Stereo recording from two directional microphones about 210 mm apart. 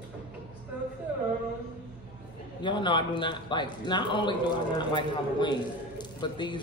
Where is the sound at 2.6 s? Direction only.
20° left (ahead or behind).